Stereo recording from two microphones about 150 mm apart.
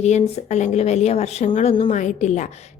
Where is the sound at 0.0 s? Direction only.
50° left (ahead or behind).